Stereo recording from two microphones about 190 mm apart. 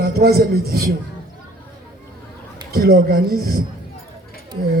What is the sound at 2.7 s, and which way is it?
Speech, 55° right (ahead or behind).